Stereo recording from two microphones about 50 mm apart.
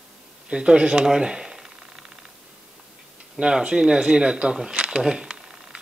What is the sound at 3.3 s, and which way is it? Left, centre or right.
Speech, centre.